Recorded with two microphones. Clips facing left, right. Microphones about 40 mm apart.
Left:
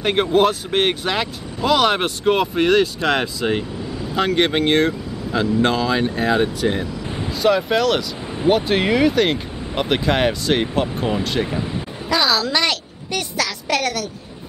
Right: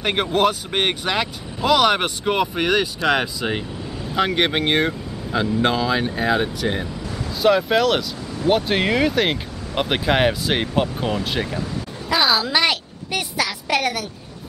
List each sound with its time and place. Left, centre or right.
0.0 s speech: centre
11.4 s speech: left
12.1 s a woman's voice: centre